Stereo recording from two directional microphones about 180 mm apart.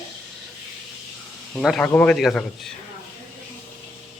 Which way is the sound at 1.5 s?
Centre (ahead or behind).